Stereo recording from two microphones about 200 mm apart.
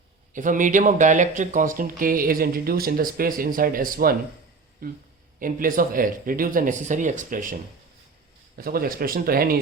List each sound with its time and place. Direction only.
0.3 s speech: 40° right (ahead or behind)
8.5 s speech: 45° right (ahead or behind)